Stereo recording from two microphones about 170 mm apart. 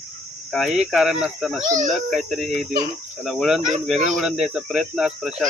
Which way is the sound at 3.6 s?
45° right (ahead or behind).